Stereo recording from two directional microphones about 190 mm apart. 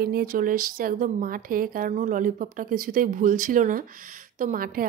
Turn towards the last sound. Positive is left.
turn(degrees=-45)  # may be behind; listen again after turning